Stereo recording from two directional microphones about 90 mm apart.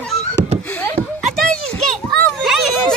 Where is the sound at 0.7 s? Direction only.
20° left (ahead or behind).